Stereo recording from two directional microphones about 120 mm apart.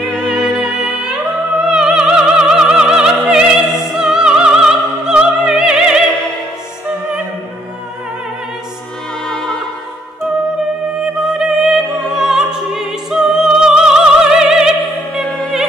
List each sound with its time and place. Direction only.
0.0 s music: 5° left (ahead or behind)
1.7 s opera: 5° right (ahead or behind)
11.2 s music: 5° right (ahead or behind)